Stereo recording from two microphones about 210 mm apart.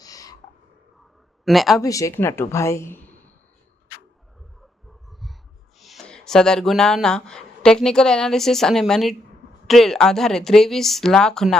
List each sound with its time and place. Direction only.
0.0 s a sound: 15° left (ahead or behind)
1.5 s speech: centre (ahead or behind)
1.8 s speech: 15° left (ahead or behind)
5.8 s speech: centre (ahead or behind)